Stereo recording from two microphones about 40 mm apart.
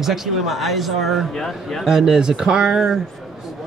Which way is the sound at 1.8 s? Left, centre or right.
Centre.